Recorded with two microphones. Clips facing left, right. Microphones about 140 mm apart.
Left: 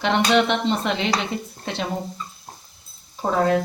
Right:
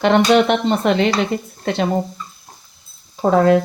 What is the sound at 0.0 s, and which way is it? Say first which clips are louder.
Speech: right 6 dB; 50° right (ahead or behind).